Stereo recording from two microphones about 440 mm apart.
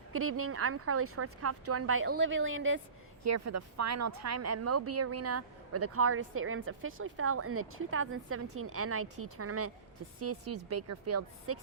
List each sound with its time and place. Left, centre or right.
0.1 s speech: right